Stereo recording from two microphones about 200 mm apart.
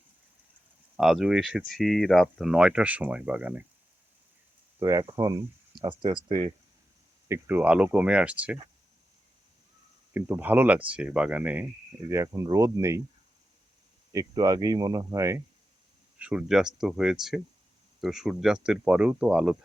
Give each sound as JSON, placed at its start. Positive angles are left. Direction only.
{"t": 0.9, "sound": "speech", "side_deg": 0}
{"t": 4.8, "sound": "speech", "side_deg": -15}
{"t": 7.3, "sound": "speech", "side_deg": -10}
{"t": 10.1, "sound": "speech", "side_deg": -10}
{"t": 14.1, "sound": "speech", "side_deg": -20}